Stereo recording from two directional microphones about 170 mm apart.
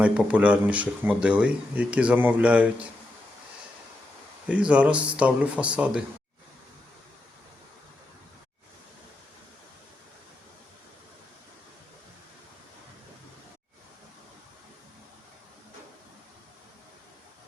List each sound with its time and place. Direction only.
0.0 s speech: 10° right (ahead or behind)
4.4 s speech: 5° right (ahead or behind)